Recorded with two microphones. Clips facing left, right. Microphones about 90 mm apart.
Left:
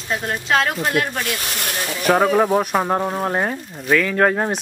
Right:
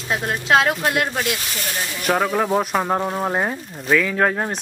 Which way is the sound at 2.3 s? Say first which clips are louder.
Left 3 dB; 5° left (ahead or behind).